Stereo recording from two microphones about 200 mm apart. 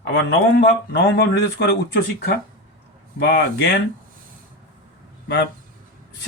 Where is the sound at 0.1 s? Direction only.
70° left (ahead or behind).